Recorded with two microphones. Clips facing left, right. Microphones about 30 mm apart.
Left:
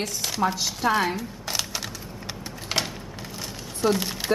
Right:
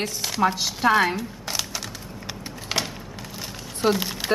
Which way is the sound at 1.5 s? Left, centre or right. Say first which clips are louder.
Left 1 dB; centre.